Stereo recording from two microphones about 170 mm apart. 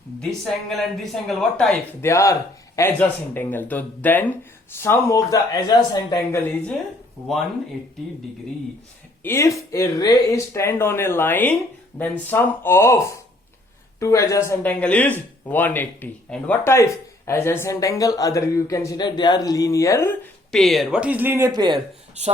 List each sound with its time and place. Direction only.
0.2 s speech: 5° left (ahead or behind)
2.0 s speech: 15° left (ahead or behind)
9.2 s speech: 15° left (ahead or behind)
20.5 s speech: centre (ahead or behind); by 21.8 s 25° right (ahead or behind)